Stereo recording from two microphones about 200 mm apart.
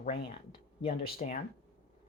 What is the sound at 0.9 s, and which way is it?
Speech, 50° left (ahead or behind).